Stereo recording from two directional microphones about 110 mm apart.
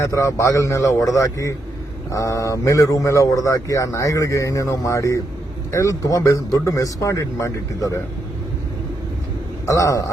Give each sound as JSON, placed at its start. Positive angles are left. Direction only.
{"t": 0.0, "sound": "speech", "side_deg": 30}
{"t": 9.6, "sound": "speech", "side_deg": 30}